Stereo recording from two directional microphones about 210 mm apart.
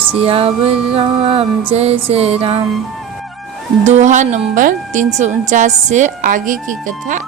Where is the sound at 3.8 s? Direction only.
35° right (ahead or behind).